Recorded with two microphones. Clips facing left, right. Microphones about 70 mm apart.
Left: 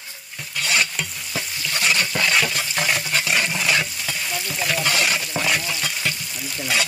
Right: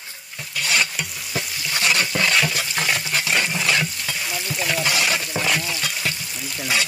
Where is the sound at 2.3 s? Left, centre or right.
Centre.